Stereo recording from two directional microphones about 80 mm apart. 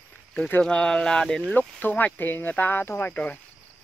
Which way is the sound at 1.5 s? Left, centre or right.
Left.